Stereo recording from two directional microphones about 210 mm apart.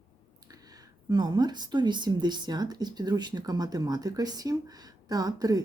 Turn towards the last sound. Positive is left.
turn(degrees=-15)  # may be behind; listen again after turning